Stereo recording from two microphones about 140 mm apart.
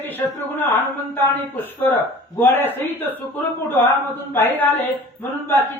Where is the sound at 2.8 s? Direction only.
15° left (ahead or behind).